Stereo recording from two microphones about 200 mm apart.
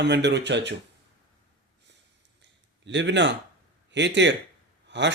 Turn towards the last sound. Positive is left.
turn(degrees=-60)  # may be behind; listen again after turning